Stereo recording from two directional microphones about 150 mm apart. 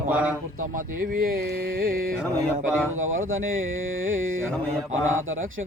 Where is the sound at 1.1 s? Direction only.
70° right (ahead or behind).